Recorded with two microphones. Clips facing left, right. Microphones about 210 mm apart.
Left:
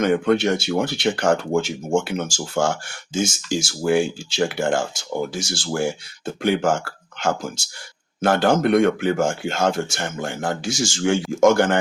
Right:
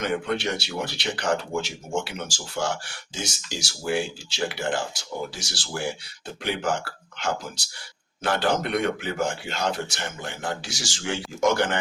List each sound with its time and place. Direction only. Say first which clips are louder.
0.0 s speech: left 8 dB; 50° left (ahead or behind)